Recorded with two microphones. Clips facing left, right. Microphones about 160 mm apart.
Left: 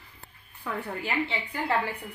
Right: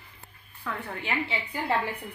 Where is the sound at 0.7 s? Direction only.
15° left (ahead or behind).